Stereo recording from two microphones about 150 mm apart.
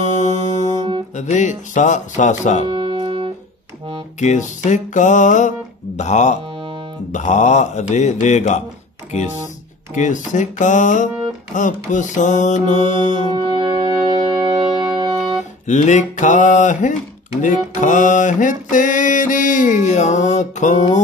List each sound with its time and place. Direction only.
0.0 s music: 50° left (ahead or behind)
1.1 s speech: 55° left (ahead or behind)
2.7 s music: 35° right (ahead or behind)
4.2 s speech: 50° left (ahead or behind)
4.6 s mantra: 55° left (ahead or behind)
5.9 s speech: 50° left (ahead or behind)
9.9 s mantra: 55° left (ahead or behind)
13.1 s music: 35° right (ahead or behind)
15.6 s mantra: 55° left (ahead or behind)